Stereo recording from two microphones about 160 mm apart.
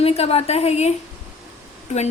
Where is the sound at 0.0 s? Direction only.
40° left (ahead or behind).